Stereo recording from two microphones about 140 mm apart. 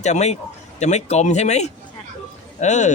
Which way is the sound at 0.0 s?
55° left (ahead or behind).